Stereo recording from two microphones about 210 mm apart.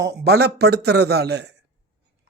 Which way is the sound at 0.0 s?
50° right (ahead or behind).